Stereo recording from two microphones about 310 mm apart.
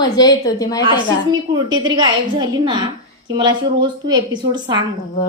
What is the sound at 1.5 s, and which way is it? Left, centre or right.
A woman's voice, centre.